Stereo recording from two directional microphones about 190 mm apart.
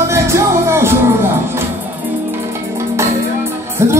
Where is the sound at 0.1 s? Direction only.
15° right (ahead or behind).